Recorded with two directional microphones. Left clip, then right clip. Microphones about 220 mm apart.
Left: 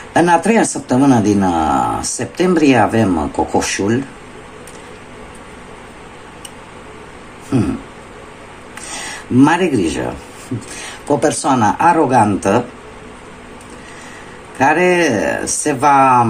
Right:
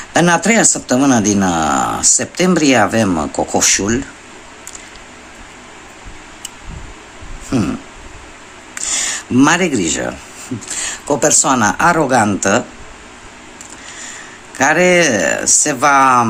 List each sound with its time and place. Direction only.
0.1 s speech: 30° right (ahead or behind)
7.5 s a sound: 30° right (ahead or behind)
9.4 s speech: 30° right (ahead or behind)
11.1 s speech: 25° right (ahead or behind)
14.6 s speech: 25° right (ahead or behind)